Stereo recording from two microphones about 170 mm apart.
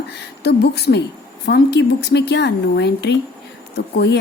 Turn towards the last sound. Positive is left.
turn(degrees=75)  # may be behind; listen again after turning